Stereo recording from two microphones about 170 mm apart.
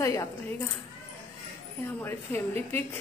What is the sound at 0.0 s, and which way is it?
Speech, 15° left (ahead or behind).